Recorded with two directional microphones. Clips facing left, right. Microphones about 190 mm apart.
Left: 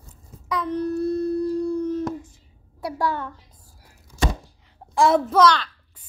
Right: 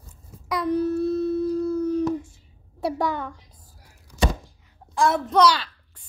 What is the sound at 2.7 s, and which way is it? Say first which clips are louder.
Speech: right 1 dB; 25° right (ahead or behind).